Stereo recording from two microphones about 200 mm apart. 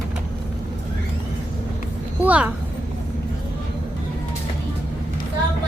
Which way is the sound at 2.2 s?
5° right (ahead or behind).